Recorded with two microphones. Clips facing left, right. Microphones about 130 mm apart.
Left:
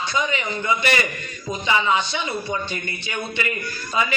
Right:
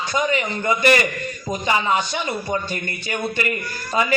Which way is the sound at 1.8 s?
45° right (ahead or behind).